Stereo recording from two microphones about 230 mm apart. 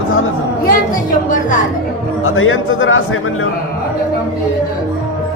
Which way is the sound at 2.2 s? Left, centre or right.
Left.